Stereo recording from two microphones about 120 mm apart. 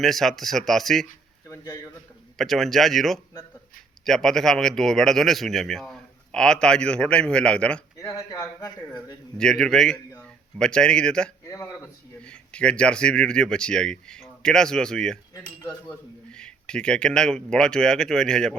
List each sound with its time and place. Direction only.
0.0 s speech: centre (ahead or behind)
1.5 s a man's voice: 30° left (ahead or behind)
2.4 s speech: centre (ahead or behind)
7.9 s a man's voice: 25° left (ahead or behind)
9.4 s a man's voice: 5° left (ahead or behind)
16.3 s speech: 5° left (ahead or behind)